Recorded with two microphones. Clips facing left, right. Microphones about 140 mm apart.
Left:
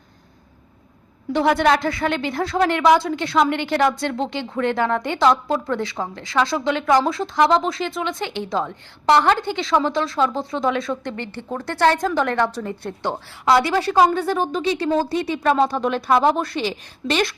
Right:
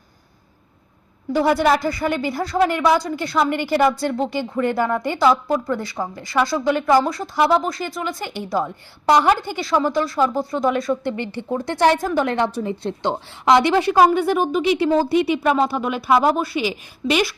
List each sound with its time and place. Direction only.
1.3 s speech: 5° right (ahead or behind)
11.2 s a woman's voice: 15° right (ahead or behind)